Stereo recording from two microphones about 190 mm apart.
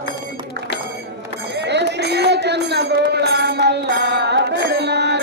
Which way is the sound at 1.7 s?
65° right (ahead or behind).